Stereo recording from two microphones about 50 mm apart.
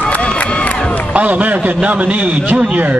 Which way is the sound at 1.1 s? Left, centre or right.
Right.